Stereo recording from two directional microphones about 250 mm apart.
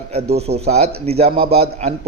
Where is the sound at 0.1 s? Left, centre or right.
Right.